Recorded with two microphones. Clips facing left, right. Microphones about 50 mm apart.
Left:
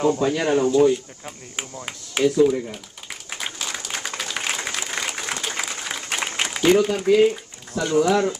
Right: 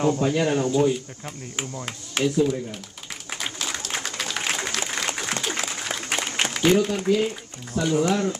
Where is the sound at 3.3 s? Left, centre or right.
Centre.